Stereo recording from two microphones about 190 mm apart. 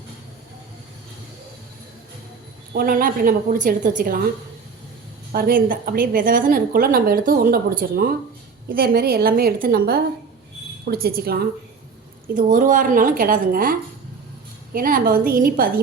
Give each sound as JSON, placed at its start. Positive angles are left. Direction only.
{"t": 2.7, "sound": "a woman's voice", "side_deg": -50}
{"t": 5.3, "sound": "a woman's voice", "side_deg": -50}
{"t": 12.3, "sound": "a woman's voice", "side_deg": -45}